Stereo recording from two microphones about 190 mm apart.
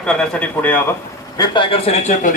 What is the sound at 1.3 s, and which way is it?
A man's voice, 25° left (ahead or behind).